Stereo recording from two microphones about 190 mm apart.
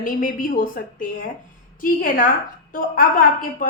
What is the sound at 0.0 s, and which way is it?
A woman's voice, 45° left (ahead or behind).